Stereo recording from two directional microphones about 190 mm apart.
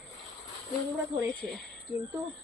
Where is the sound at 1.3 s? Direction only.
5° left (ahead or behind).